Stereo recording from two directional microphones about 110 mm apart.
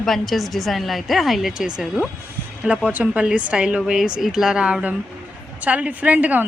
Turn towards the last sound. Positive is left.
turn(degrees=-15)  # may be behind; listen again after turning